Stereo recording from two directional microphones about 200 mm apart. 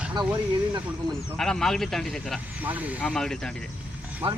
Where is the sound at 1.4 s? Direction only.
Centre (ahead or behind).